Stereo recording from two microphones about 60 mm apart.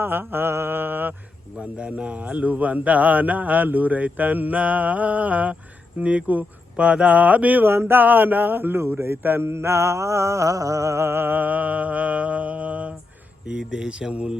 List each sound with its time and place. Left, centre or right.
0.0 s mantra: right
1.9 s speech: right
7.7 s mantra: right
8.8 s mantra: right
13.5 s speech: centre